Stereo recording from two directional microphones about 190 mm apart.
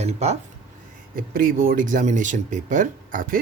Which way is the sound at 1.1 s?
45° right (ahead or behind).